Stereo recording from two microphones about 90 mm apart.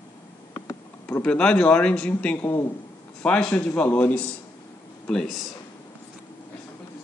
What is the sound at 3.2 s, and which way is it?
A man's voice, 15° left (ahead or behind).